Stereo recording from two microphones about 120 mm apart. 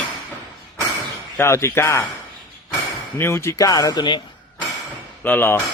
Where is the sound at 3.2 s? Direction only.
20° left (ahead or behind).